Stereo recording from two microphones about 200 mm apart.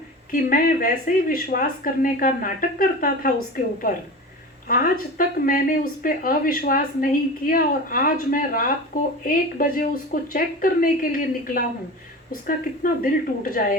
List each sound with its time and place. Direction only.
0.3 s speech: 45° left (ahead or behind)